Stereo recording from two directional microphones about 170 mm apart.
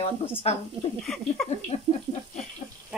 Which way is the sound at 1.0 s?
Centre (ahead or behind).